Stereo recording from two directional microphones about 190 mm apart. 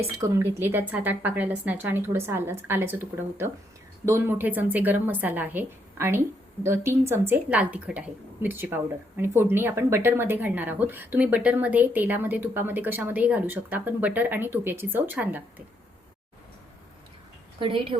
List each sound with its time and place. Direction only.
0.2 s a woman's voice: 15° right (ahead or behind)
17.6 s speech: 25° right (ahead or behind)